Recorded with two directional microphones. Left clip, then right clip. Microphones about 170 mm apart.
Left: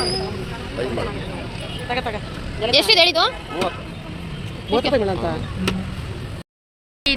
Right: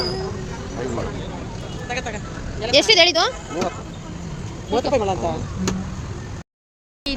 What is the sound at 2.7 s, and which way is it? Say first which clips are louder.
Speech: right 1 dB; 25° right (ahead or behind).